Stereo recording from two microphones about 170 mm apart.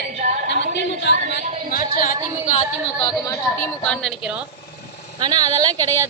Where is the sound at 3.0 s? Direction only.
20° left (ahead or behind).